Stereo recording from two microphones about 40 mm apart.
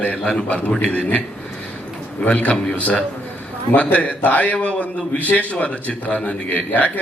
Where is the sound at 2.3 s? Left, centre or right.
Left.